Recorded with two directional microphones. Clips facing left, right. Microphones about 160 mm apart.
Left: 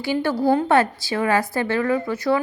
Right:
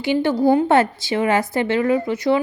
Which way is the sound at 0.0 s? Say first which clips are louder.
Right 3 dB; 20° right (ahead or behind).